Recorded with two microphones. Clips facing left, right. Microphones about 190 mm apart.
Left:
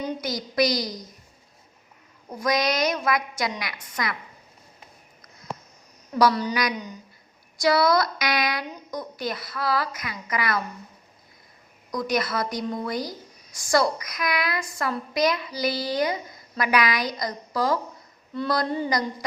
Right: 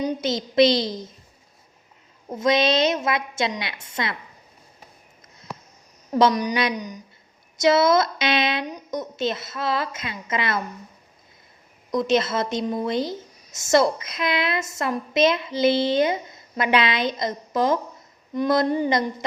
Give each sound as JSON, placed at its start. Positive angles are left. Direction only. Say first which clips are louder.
{"t": 0.0, "sound": "a woman's voice", "louder": "right 5 dB", "side_deg": -20}
{"t": 2.3, "sound": "a woman's voice", "louder": "right 4 dB", "side_deg": -25}
{"t": 6.1, "sound": "a woman's voice", "louder": "right 2 dB", "side_deg": -20}
{"t": 11.9, "sound": "a woman's voice", "louder": "right 5 dB", "side_deg": -25}